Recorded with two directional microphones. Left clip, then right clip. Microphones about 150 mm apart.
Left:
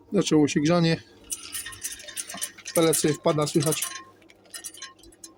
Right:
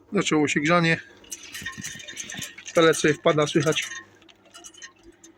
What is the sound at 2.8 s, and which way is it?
Speech, 10° left (ahead or behind).